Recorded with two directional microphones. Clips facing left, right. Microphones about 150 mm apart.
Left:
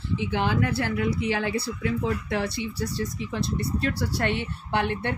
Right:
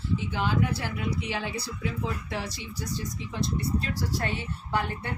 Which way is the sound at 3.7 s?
75° left (ahead or behind).